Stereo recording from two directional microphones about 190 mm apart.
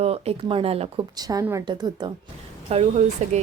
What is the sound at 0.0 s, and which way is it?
Speech, 30° right (ahead or behind).